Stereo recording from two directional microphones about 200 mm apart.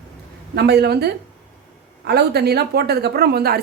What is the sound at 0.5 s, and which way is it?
A woman's voice, 55° right (ahead or behind).